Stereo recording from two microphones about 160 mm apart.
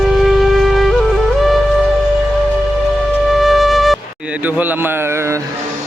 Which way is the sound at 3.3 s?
Centre (ahead or behind).